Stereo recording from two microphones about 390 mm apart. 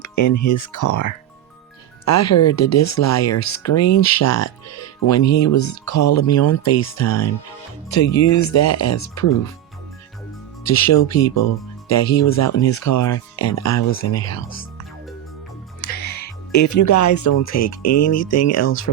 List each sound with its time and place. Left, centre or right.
0.0 s speech: left
10.7 s speech: left
15.8 s speech: left